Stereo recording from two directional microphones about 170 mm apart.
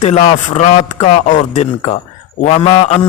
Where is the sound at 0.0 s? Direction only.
45° left (ahead or behind).